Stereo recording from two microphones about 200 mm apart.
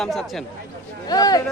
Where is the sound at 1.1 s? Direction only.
20° left (ahead or behind).